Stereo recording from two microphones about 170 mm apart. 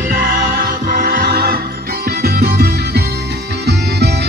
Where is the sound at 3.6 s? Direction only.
80° right.